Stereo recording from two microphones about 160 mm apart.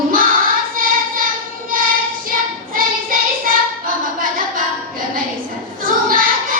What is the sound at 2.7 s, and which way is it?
Child singing, 60° right (ahead or behind).